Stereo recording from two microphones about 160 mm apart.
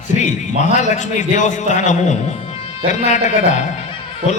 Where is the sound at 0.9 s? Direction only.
50° left (ahead or behind).